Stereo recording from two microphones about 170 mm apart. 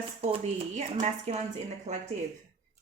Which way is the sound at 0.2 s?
35° right (ahead or behind).